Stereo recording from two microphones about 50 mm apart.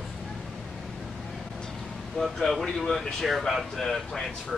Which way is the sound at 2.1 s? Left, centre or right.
Centre.